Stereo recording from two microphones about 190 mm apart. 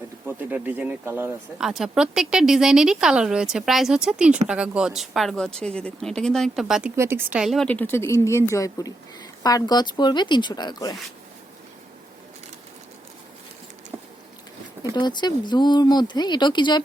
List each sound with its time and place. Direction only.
0.3 s speech: 10° right (ahead or behind)
6.9 s speech: 15° right (ahead or behind); by 10.9 s 20° left (ahead or behind)
13.9 s a sound: 10° right (ahead or behind)
14.9 s speech: 25° left (ahead or behind)